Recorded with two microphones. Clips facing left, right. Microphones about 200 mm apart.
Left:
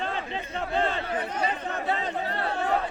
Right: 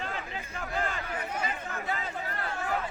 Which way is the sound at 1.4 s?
35° left (ahead or behind).